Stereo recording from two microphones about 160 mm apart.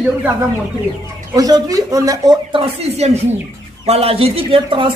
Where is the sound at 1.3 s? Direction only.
20° right (ahead or behind).